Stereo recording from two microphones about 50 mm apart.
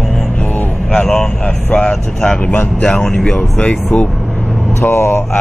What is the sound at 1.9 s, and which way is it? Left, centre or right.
Speech, centre.